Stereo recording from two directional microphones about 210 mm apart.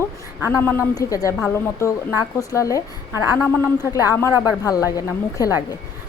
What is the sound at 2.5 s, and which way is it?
A woman's voice, 15° left (ahead or behind).